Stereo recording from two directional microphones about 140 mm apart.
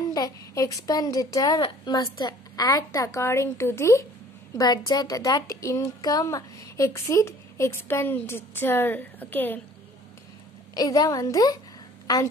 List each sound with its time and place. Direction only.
0.1 s a woman's voice: 25° left (ahead or behind)
4.6 s a woman's voice: 30° left (ahead or behind); by 9.6 s 15° left (ahead or behind)
10.7 s a woman's voice: 25° left (ahead or behind)